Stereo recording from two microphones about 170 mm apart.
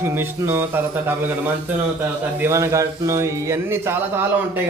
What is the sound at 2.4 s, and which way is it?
A man's voice, 15° right (ahead or behind).